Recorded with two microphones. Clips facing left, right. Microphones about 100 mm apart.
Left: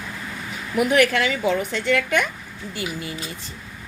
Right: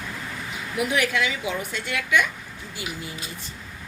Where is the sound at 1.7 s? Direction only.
80° left.